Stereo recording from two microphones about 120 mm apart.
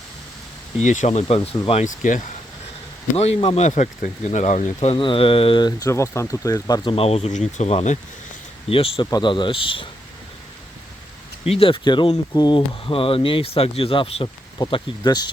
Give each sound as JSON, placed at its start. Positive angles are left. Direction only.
{"t": 0.8, "sound": "speech", "side_deg": 75}
{"t": 1.8, "sound": "speech", "side_deg": 90}
{"t": 3.2, "sound": "speech", "side_deg": 60}
{"t": 4.9, "sound": "speech", "side_deg": 45}
{"t": 5.9, "sound": "speech", "side_deg": 25}
{"t": 6.8, "sound": "speech", "side_deg": 55}
{"t": 8.7, "sound": "speech", "side_deg": 50}
{"t": 9.0, "sound": "speech", "side_deg": 35}
{"t": 11.4, "sound": "speech", "side_deg": 50}
{"t": 14.7, "sound": "speech", "side_deg": 35}